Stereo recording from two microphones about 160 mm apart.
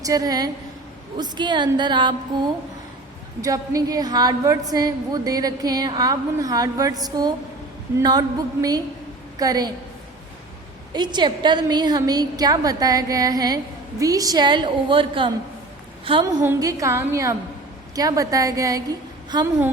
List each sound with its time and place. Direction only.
0.0 s a woman's voice: 20° right (ahead or behind)
3.4 s a woman's voice: 20° right (ahead or behind)
10.9 s a woman's voice: 25° right (ahead or behind)
16.2 s a woman's voice: 15° right (ahead or behind)